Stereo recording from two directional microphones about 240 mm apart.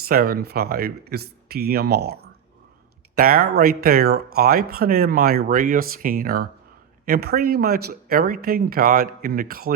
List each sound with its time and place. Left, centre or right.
0.1 s speech: right